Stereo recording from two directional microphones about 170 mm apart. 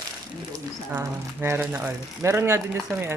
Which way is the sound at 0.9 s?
15° right (ahead or behind).